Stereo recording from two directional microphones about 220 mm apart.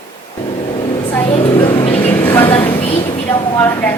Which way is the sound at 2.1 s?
10° left (ahead or behind).